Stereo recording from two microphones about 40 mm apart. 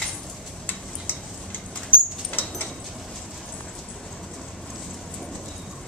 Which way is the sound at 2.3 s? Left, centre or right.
Left.